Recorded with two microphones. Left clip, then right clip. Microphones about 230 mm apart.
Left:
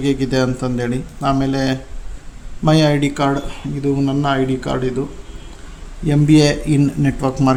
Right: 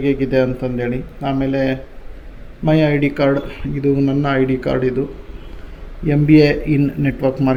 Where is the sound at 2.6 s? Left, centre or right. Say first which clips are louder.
Even; left.